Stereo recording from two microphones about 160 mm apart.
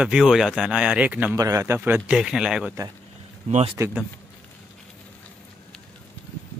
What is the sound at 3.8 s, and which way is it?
Speech, 20° right (ahead or behind).